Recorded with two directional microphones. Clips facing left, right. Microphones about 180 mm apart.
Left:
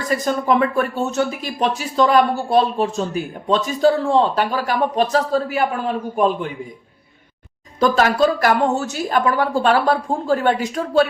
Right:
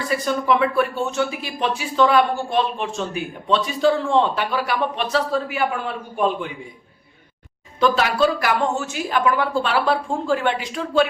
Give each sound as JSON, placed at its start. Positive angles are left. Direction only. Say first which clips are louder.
{"t": 0.0, "sound": "speech", "louder": "left 2 dB", "side_deg": 45}
{"t": 7.8, "sound": "speech", "louder": "left 2 dB", "side_deg": 45}